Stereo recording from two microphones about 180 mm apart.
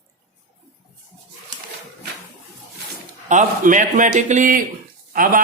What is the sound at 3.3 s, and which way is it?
Speech, 45° right (ahead or behind).